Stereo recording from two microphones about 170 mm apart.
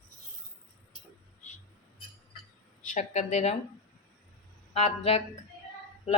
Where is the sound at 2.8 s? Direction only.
45° left (ahead or behind).